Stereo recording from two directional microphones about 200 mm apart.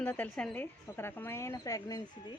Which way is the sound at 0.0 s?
10° left (ahead or behind).